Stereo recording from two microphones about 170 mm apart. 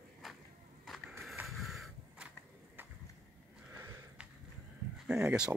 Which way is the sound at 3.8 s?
15° right (ahead or behind).